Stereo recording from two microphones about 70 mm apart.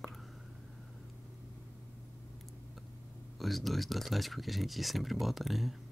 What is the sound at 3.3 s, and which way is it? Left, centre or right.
Speech, centre.